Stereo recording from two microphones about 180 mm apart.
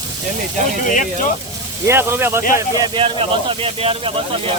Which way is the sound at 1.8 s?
15° right (ahead or behind).